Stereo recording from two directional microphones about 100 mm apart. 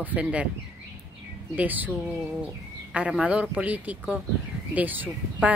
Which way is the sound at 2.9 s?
10° right (ahead or behind).